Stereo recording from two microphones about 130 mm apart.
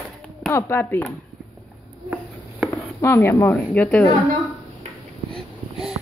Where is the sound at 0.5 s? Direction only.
20° left (ahead or behind).